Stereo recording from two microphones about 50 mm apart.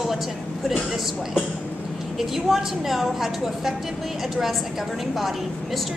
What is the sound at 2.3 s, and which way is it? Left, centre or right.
A woman's voice, centre.